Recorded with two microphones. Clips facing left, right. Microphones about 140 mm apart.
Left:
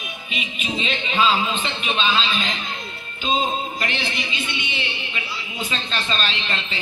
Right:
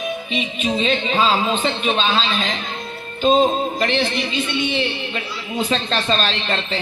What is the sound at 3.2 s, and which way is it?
Speech, 45° right (ahead or behind).